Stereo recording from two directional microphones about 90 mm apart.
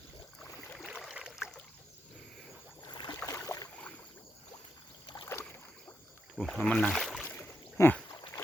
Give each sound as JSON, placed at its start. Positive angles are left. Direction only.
{"t": 0.9, "sound": "boat", "side_deg": -10}
{"t": 2.9, "sound": "boat", "side_deg": 55}
{"t": 3.2, "sound": "boat", "side_deg": 40}
{"t": 5.0, "sound": "rowboat", "side_deg": 55}
{"t": 6.3, "sound": "speech", "side_deg": 0}
{"t": 6.7, "sound": "speech", "side_deg": 15}
{"t": 6.9, "sound": "boat", "side_deg": 5}
{"t": 7.3, "sound": "a sound", "side_deg": 25}